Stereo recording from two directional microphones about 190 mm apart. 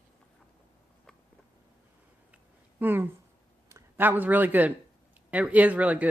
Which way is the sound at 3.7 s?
15° right (ahead or behind).